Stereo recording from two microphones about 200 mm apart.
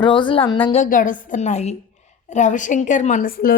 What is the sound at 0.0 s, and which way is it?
Speech, 25° left (ahead or behind).